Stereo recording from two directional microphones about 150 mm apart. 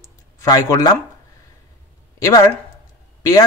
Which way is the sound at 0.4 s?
20° left (ahead or behind).